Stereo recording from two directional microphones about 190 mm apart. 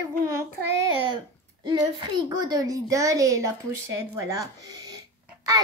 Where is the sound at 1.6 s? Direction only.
25° right (ahead or behind).